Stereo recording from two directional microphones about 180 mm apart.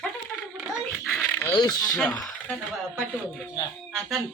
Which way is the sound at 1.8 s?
Centre (ahead or behind).